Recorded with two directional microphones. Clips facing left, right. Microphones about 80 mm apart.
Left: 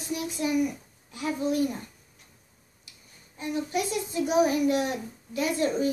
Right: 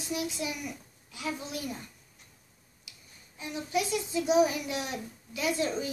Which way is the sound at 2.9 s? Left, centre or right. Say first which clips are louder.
Even; left.